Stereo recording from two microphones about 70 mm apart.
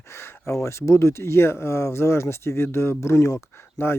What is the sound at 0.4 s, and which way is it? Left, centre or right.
Speech, left.